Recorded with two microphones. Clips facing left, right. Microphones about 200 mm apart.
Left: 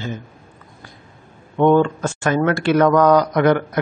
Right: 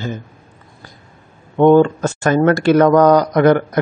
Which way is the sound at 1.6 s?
35° right (ahead or behind).